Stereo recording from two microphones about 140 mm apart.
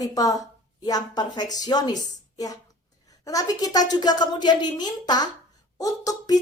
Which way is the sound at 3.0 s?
25° left (ahead or behind).